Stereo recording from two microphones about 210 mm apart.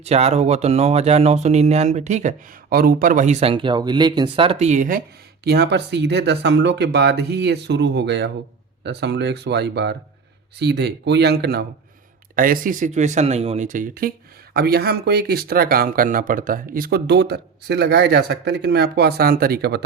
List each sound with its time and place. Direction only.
0.0 s speech: 30° right (ahead or behind); by 19.8 s 45° right (ahead or behind)